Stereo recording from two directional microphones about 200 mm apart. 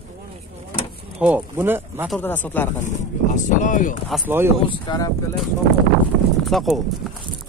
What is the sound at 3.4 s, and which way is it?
Speech, 40° left (ahead or behind).